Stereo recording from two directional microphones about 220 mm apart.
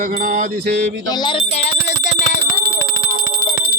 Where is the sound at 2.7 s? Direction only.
40° right (ahead or behind).